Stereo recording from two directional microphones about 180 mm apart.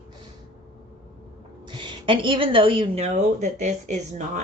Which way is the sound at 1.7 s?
25° right (ahead or behind).